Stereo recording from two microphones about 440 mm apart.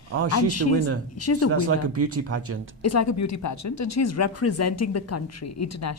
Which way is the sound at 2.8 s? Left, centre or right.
Left.